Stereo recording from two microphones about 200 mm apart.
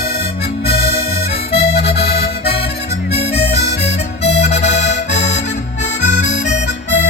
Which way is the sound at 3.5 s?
35° left (ahead or behind).